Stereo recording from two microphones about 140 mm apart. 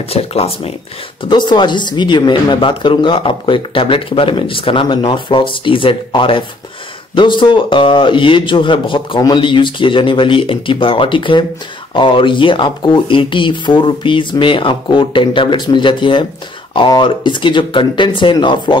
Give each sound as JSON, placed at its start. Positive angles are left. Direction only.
{"t": 0.0, "sound": "speech", "side_deg": 45}
{"t": 1.3, "sound": "speech", "side_deg": 35}